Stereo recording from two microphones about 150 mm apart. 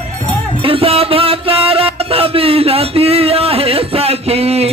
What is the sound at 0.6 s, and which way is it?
Music, 40° right (ahead or behind).